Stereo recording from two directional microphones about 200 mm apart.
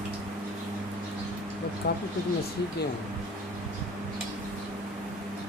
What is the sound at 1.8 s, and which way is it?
Speech, 50° left (ahead or behind).